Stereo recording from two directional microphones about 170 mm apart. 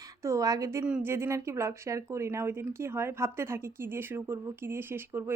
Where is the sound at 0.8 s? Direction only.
10° right (ahead or behind).